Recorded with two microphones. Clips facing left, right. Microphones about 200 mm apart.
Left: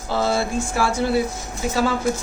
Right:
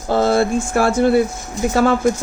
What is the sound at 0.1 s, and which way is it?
Speech, 55° right (ahead or behind).